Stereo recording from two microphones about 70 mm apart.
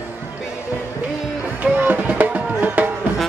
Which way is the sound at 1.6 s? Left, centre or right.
Right.